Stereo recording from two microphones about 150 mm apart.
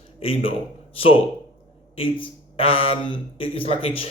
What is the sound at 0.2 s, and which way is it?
Speech, 40° left (ahead or behind).